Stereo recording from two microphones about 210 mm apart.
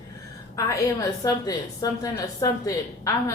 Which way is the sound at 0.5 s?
15° left (ahead or behind).